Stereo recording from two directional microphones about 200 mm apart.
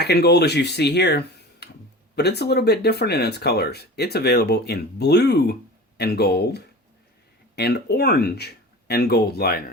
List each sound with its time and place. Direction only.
0.0 s speech: 55° left (ahead or behind)